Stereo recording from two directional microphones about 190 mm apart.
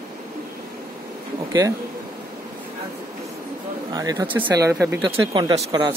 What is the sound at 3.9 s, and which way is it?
Speech, 15° right (ahead or behind).